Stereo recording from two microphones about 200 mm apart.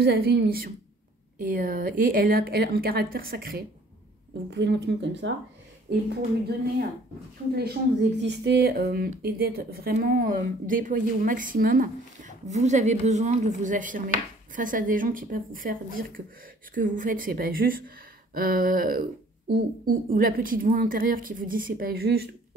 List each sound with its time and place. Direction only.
0.0 s speech: 55° right (ahead or behind)
4.5 s speech: 60° right (ahead or behind)